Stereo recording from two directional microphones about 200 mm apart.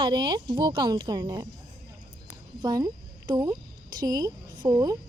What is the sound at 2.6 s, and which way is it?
A woman's voice, 20° right (ahead or behind).